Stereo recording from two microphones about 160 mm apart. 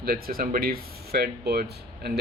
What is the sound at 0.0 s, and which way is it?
Speech, 70° right (ahead or behind).